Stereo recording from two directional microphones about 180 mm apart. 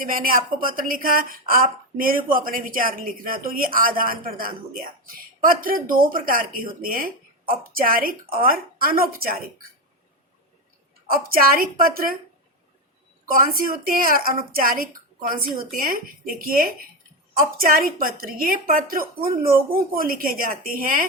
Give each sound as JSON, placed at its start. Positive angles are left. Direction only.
{"t": 0.0, "sound": "speech", "side_deg": -50}
{"t": 11.1, "sound": "speech", "side_deg": -55}
{"t": 13.3, "sound": "speech", "side_deg": -55}